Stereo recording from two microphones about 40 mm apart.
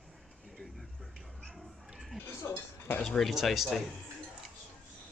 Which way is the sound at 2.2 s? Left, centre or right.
Left.